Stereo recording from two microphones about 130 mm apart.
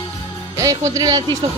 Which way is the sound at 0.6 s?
25° right (ahead or behind).